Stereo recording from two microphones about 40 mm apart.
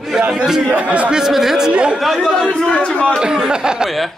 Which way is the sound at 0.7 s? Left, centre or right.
Right.